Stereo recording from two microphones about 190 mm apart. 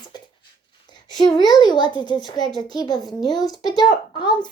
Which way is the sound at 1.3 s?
25° left (ahead or behind).